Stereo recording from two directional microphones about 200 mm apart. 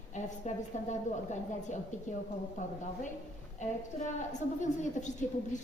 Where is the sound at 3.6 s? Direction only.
35° left (ahead or behind).